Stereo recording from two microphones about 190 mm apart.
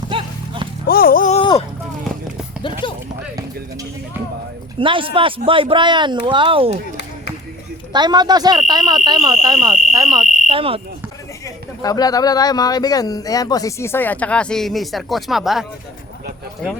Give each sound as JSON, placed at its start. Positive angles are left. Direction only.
{"t": 0.1, "sound": "clip-clop", "side_deg": -25}
{"t": 0.9, "sound": "music", "side_deg": 50}
{"t": 1.4, "sound": "a sound", "side_deg": 25}
{"t": 2.8, "sound": "a sound", "side_deg": 25}
{"t": 4.8, "sound": "speech", "side_deg": -25}
{"t": 7.9, "sound": "speech", "side_deg": -20}
{"t": 10.2, "sound": "fire alarm", "side_deg": 40}
{"t": 10.5, "sound": "speech", "side_deg": -30}
{"t": 11.4, "sound": "speech", "side_deg": 20}